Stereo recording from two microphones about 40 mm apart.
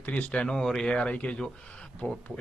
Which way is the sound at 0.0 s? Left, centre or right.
Left.